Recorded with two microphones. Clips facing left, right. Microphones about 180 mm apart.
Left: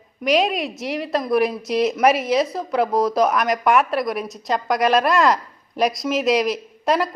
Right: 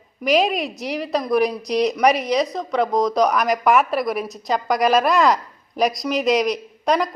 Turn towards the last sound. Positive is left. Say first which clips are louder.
# even
turn(degrees=0)  # may be behind; listen again after turning